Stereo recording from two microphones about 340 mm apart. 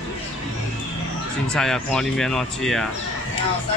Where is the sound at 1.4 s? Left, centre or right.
Centre.